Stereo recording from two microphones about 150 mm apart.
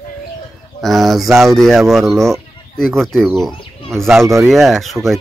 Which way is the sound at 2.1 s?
20° right (ahead or behind).